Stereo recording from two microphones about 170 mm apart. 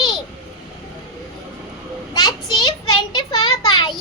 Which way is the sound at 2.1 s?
25° left (ahead or behind).